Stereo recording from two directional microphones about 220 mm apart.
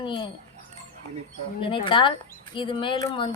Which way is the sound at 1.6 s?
25° left (ahead or behind).